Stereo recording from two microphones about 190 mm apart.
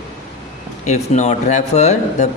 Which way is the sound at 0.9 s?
35° left (ahead or behind).